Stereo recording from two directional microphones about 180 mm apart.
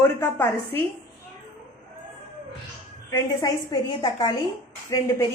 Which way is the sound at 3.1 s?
20° left (ahead or behind).